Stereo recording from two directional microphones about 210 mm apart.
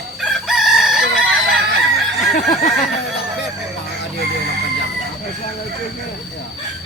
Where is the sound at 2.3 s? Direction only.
40° left (ahead or behind).